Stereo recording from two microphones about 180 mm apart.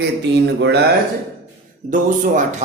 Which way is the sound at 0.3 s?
70° right (ahead or behind).